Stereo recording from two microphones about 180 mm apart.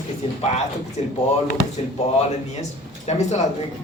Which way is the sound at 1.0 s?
40° left (ahead or behind).